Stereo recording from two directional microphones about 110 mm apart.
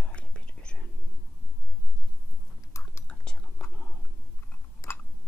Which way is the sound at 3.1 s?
10° left (ahead or behind).